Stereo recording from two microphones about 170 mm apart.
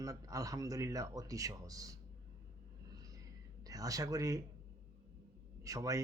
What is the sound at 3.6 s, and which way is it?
Speech, 20° right (ahead or behind).